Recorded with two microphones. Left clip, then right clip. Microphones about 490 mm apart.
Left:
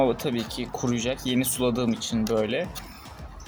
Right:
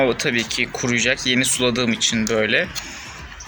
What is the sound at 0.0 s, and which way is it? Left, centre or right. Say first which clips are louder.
Speech: right 6 dB; left.